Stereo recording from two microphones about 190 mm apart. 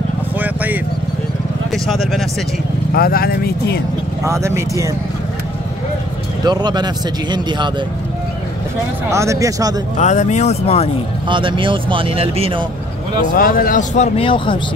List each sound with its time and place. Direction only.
0.4 s vehicle: 10° right (ahead or behind)
2.9 s speech: 50° left (ahead or behind)
4.2 s speech: 15° right (ahead or behind)
6.4 s speech: 20° right (ahead or behind)
9.1 s speech: 15° right (ahead or behind)
9.9 s speech: 40° left (ahead or behind)
11.2 s speech: 25° right (ahead or behind)
13.3 s speech: 50° left (ahead or behind); by 14.6 s 25° left (ahead or behind)